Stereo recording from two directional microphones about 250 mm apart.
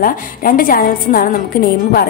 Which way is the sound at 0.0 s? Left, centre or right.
Left.